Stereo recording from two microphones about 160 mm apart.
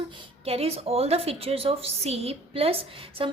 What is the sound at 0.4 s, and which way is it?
A woman's voice, 40° right (ahead or behind).